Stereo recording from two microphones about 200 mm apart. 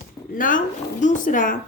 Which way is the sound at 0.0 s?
40° left (ahead or behind).